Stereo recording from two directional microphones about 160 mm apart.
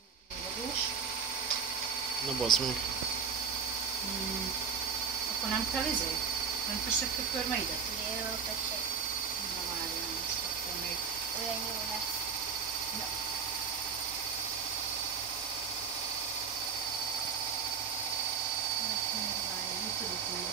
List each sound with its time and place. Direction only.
2.4 s speech: centre (ahead or behind)